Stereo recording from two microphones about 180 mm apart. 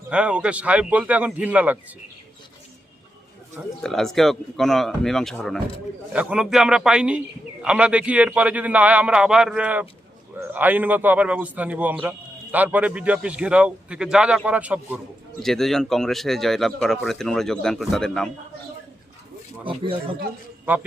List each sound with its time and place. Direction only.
0.1 s a man's voice: 5° right (ahead or behind)
3.8 s a man's voice: 5° left (ahead or behind)
15.4 s speech: centre (ahead or behind)
19.6 s speech: 30° right (ahead or behind)
20.7 s a man's voice: 10° right (ahead or behind)